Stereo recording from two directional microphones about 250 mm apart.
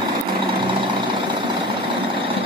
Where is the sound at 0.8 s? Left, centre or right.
Centre.